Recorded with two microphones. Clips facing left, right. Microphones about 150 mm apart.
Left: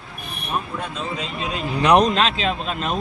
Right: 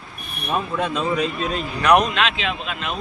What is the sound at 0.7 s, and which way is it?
Speech, 85° right.